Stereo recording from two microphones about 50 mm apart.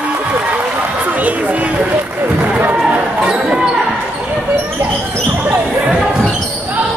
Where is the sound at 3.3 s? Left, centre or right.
Centre.